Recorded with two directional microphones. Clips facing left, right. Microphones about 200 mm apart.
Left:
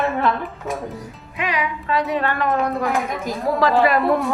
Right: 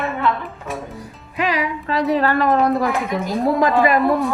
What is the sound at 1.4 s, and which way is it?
A woman's voice, 35° right (ahead or behind).